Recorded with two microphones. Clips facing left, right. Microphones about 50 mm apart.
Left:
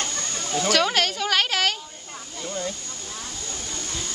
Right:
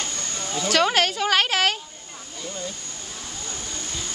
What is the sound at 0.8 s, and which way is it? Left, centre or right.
Speech, centre.